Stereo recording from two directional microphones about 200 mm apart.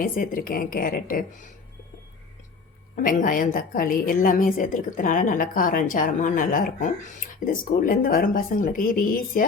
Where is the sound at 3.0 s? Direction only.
40° left (ahead or behind).